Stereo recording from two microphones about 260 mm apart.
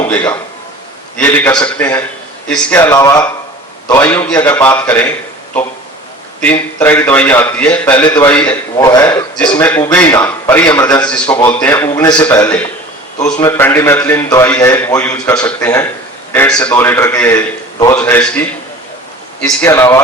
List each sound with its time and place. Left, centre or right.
0.0 s a man's voice: centre
6.7 s a man's voice: centre